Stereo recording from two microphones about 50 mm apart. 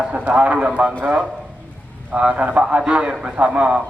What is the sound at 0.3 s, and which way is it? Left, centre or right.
A man's voice, right.